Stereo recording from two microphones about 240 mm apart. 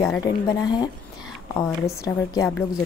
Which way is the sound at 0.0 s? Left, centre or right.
Centre.